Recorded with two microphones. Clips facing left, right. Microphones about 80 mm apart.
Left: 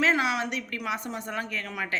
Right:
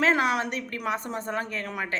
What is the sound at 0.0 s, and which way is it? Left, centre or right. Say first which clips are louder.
A woman's voice: right 2 dB; right.